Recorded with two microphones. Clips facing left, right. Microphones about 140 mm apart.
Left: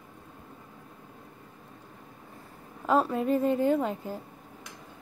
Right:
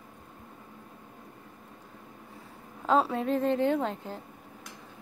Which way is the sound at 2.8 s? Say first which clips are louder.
Even; 5° left (ahead or behind).